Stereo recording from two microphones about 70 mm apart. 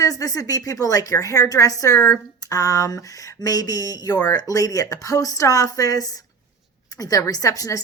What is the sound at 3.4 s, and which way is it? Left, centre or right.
A woman's voice, left.